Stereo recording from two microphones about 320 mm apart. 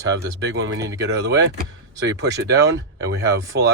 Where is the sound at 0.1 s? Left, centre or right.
Right.